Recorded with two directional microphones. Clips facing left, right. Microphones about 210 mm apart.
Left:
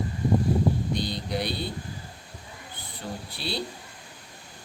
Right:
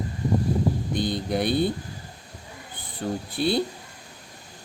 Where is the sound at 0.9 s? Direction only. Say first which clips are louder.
Right 4 dB; 50° right (ahead or behind).